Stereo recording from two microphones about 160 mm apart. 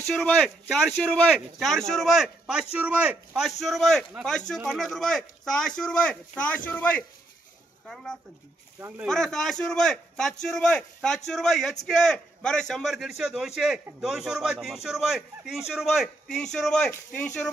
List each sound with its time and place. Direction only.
0.0 s speech: 5° left (ahead or behind)
8.7 s speech: 15° right (ahead or behind)
9.0 s speech: 5° left (ahead or behind)